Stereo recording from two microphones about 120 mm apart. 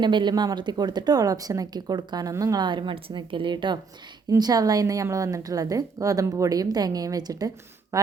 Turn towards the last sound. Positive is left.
turn(degrees=-30)  # may be behind; listen again after turning